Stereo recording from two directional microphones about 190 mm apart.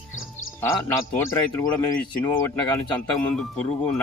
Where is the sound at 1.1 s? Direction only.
20° left (ahead or behind).